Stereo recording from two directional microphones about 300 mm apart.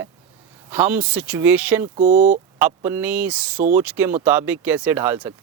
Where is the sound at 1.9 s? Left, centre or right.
Right.